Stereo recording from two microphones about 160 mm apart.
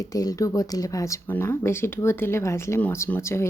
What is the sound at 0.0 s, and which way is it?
Speech, 25° left (ahead or behind).